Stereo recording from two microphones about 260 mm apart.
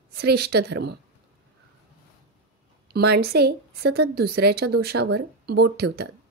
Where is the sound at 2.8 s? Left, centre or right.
Right.